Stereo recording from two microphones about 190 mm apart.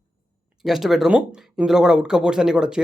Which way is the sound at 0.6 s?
Centre (ahead or behind).